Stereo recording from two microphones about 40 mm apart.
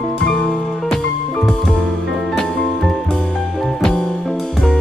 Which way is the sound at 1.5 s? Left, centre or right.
Centre.